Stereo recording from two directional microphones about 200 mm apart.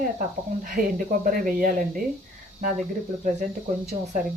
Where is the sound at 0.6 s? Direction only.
45° right (ahead or behind).